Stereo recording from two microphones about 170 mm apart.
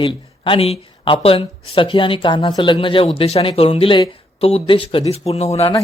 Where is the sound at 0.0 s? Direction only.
30° left (ahead or behind).